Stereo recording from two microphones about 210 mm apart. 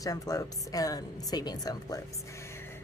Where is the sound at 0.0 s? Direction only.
15° left (ahead or behind).